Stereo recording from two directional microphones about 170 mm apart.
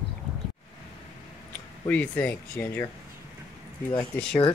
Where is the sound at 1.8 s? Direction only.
10° left (ahead or behind).